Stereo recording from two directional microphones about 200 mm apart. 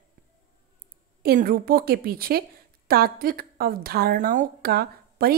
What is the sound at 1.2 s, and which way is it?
A woman's voice, 45° right (ahead or behind).